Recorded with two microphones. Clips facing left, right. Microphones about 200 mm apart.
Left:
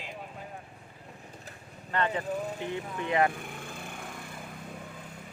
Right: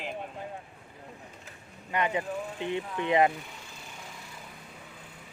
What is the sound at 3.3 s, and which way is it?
Vehicle, 50° left (ahead or behind).